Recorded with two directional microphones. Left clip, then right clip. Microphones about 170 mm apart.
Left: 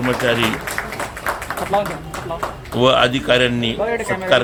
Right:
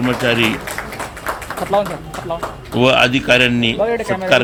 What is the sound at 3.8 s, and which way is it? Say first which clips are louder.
Speech: right 3 dB; 90° right.